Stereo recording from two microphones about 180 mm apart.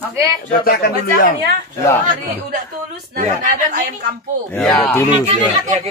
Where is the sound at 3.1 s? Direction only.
45° right (ahead or behind).